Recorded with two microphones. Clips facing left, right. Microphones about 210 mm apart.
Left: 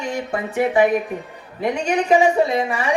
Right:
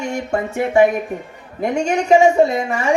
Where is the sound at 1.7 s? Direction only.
45° right (ahead or behind).